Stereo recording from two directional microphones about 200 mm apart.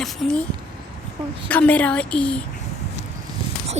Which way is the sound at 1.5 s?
5° left (ahead or behind).